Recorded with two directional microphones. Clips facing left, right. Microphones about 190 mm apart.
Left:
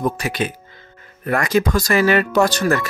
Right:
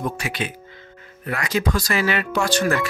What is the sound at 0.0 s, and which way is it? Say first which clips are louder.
Speech: left 5 dB; 40° left (ahead or behind).